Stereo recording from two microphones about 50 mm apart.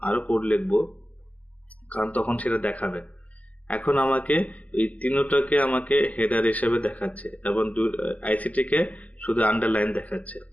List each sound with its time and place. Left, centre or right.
0.0 s speech: left